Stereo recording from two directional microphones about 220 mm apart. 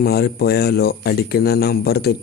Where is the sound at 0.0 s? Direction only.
45° left (ahead or behind).